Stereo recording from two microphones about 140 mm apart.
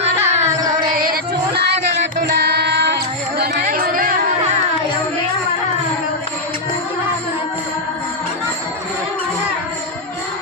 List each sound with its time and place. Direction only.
0.0 s a sound: 50° right (ahead or behind)
0.9 s music: 90° right
3.6 s music: 85° right